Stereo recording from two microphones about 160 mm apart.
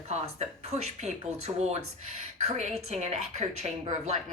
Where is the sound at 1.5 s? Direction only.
40° right (ahead or behind).